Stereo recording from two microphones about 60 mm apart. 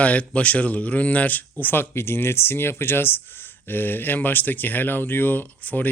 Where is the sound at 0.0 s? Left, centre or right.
Left.